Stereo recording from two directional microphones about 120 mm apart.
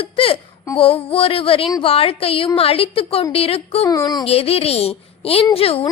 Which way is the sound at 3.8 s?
30° left (ahead or behind).